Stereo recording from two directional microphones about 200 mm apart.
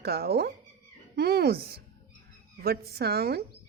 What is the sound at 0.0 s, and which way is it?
Speech, 50° right (ahead or behind).